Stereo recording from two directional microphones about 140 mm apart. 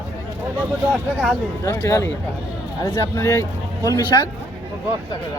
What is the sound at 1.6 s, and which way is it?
Speech, 20° left (ahead or behind).